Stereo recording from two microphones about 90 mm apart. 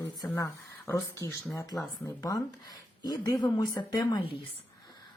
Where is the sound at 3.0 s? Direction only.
50° left (ahead or behind); by 4.3 s 70° left (ahead or behind).